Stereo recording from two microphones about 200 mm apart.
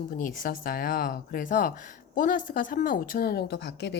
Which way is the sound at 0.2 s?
45° left (ahead or behind).